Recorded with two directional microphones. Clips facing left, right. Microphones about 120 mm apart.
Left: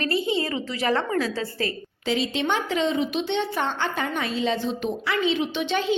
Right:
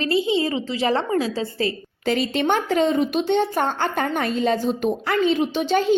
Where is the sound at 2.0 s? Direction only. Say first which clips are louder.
Right 4 dB; 50° right (ahead or behind).